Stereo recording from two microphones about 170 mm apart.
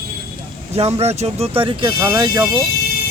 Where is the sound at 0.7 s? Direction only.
40° right (ahead or behind).